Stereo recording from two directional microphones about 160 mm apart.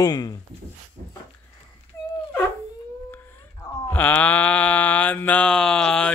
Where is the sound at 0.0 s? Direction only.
25° left (ahead or behind).